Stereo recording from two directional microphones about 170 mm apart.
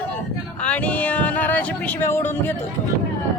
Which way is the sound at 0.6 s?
10° left (ahead or behind).